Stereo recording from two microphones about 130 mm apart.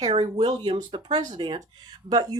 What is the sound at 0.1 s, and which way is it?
Speech, 50° right (ahead or behind).